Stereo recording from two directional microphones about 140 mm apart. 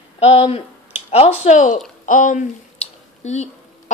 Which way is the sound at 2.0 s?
65° left (ahead or behind).